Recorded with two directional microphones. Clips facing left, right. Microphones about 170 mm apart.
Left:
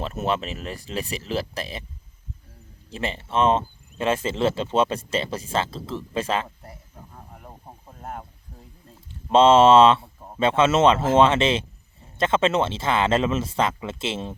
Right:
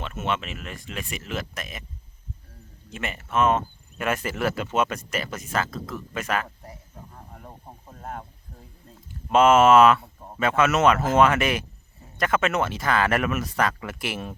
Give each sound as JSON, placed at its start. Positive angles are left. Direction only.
{"t": 0.0, "sound": "speech", "side_deg": 35}
{"t": 2.9, "sound": "speech", "side_deg": 30}
{"t": 7.3, "sound": "snake", "side_deg": 5}
{"t": 9.0, "sound": "speech", "side_deg": 30}
{"t": 10.2, "sound": "a sound", "side_deg": 5}
{"t": 10.4, "sound": "speech", "side_deg": 25}